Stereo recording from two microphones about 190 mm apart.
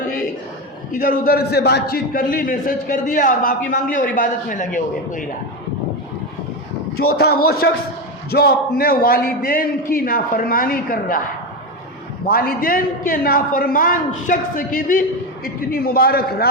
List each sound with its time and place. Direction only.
0.9 s a man's voice: 50° left (ahead or behind)
7.2 s a man's voice: 55° left (ahead or behind)
12.2 s a man's voice: 50° left (ahead or behind)